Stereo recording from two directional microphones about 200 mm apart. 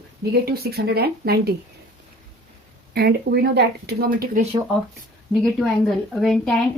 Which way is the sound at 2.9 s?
50° right (ahead or behind).